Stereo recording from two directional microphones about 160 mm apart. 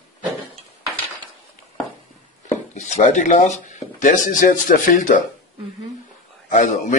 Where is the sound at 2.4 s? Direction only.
45° left (ahead or behind).